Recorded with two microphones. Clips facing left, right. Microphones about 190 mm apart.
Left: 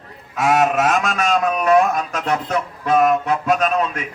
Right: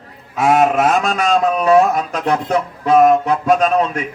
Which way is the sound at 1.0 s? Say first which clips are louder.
Right 3 dB; 30° right (ahead or behind).